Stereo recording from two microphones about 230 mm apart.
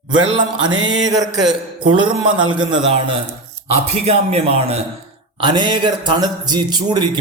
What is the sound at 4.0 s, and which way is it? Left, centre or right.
Speech, right.